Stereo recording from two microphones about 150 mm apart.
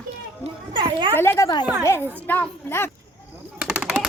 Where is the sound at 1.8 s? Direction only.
15° left (ahead or behind).